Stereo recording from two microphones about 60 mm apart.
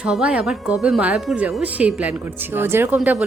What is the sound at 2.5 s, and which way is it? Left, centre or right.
Speech, right.